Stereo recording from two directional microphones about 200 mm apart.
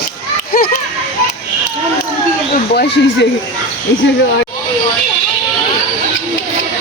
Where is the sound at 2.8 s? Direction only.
60° left (ahead or behind).